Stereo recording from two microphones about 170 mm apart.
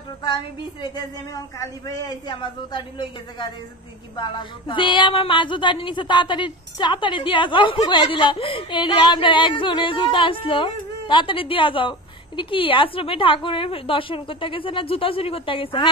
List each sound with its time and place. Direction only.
0.8 s a woman's voice: 20° left (ahead or behind)